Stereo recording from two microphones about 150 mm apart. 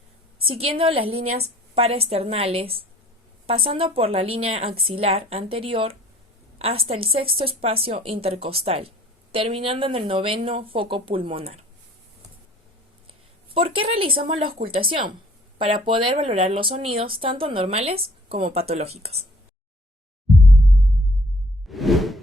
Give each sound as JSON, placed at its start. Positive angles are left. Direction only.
{"t": 0.5, "sound": "a woman's voice", "side_deg": -40}
{"t": 13.5, "sound": "a woman's voice", "side_deg": -35}
{"t": 21.7, "sound": "whoosh", "side_deg": 0}